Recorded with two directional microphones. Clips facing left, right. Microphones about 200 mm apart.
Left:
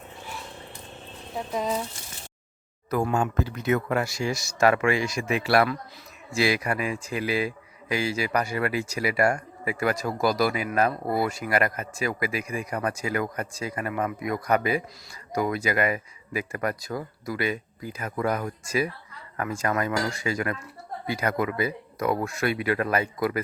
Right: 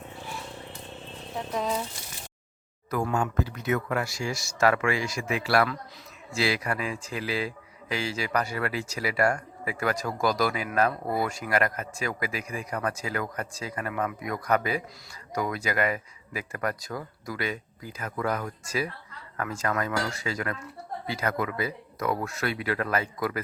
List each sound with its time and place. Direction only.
1.5 s speech: 5° left (ahead or behind)
2.9 s speech: 25° left (ahead or behind)